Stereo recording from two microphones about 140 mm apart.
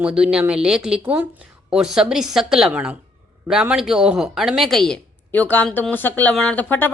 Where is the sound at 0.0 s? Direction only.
5° right (ahead or behind).